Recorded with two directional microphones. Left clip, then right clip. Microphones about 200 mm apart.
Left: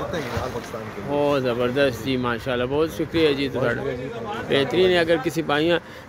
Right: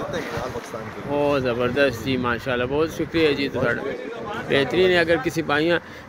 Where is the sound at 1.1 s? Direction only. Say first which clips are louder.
Even; centre (ahead or behind).